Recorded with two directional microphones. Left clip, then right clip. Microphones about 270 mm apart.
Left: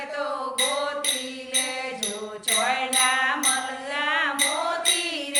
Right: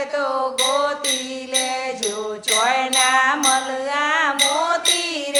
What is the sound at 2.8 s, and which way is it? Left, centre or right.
Music, right.